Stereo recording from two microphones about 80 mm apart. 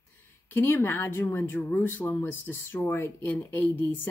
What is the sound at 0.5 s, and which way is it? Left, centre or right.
Speech, left.